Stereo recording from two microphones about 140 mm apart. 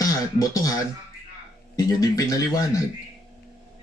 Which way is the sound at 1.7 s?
25° left (ahead or behind).